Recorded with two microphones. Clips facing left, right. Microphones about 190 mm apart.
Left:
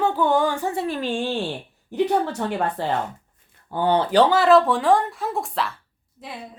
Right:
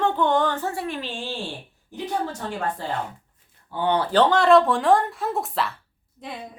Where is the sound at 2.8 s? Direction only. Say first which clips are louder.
Left 5 dB; 70° left (ahead or behind).